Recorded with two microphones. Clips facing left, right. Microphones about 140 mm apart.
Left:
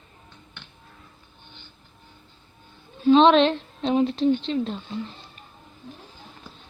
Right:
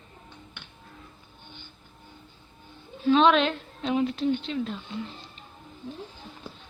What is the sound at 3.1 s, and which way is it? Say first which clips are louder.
A woman's voice: left 5 dB; 30° left (ahead or behind).